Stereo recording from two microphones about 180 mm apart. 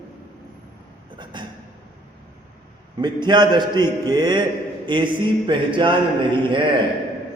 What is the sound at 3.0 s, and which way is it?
A man's voice, 25° right (ahead or behind).